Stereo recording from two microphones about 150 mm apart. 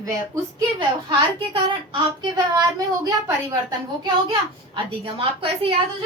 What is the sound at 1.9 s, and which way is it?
A woman's voice, 30° right (ahead or behind).